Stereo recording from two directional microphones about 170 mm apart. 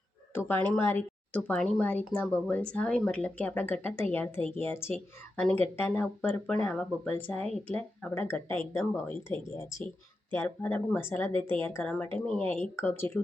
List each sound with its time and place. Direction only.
0.3 s speech: 10° left (ahead or behind)
11.3 s speech: 30° right (ahead or behind)
11.7 s speech: 10° left (ahead or behind)